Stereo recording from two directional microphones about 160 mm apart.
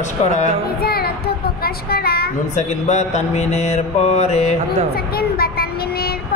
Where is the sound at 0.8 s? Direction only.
75° left (ahead or behind).